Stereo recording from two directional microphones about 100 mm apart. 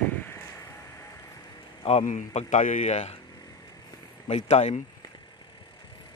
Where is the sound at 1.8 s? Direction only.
90° left.